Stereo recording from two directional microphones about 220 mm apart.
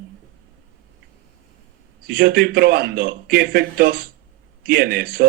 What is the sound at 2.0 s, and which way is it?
Speech, 45° right (ahead or behind).